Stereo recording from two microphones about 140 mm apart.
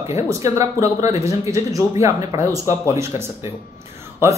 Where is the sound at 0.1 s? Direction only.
20° right (ahead or behind).